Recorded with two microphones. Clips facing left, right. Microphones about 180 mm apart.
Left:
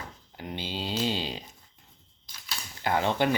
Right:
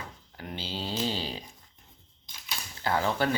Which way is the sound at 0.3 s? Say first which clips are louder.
Left 2 dB; 15° left (ahead or behind).